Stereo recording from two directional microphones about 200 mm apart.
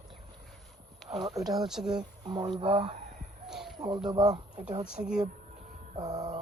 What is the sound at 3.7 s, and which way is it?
Speech, 20° right (ahead or behind).